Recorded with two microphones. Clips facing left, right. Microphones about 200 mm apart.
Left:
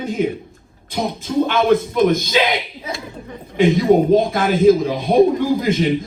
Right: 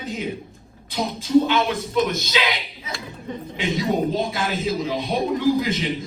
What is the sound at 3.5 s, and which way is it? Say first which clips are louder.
Speech: left 10 dB; 50° left (ahead or behind).